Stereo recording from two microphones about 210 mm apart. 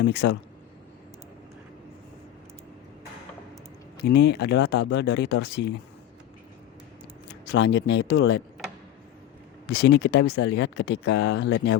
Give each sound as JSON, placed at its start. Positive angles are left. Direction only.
{"t": 0.0, "sound": "speech", "side_deg": 55}
{"t": 4.0, "sound": "speech", "side_deg": 50}
{"t": 7.3, "sound": "speech", "side_deg": 55}
{"t": 9.6, "sound": "speech", "side_deg": 50}